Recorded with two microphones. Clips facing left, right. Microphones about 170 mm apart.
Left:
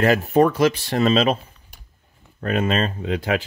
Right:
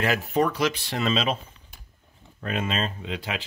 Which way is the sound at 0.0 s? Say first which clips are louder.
Left 7 dB; 45° left (ahead or behind).